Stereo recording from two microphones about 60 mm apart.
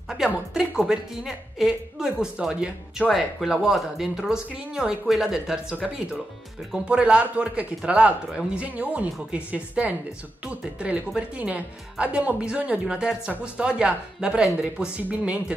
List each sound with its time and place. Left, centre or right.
0.2 s speech: centre
3.1 s a woman's voice: centre; by 15.3 s right